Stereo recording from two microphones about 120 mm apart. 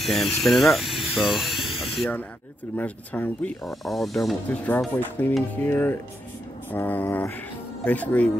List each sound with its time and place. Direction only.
0.0 s speech: centre (ahead or behind)
2.7 s speech: 15° left (ahead or behind)
3.6 s speech: centre (ahead or behind)
4.5 s speech: 15° left (ahead or behind)